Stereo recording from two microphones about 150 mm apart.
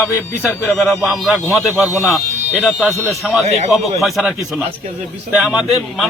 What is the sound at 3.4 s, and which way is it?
Speech, 50° right (ahead or behind).